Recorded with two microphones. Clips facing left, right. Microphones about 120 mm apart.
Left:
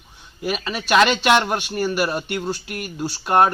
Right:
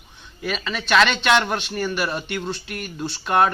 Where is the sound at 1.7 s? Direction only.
35° left (ahead or behind).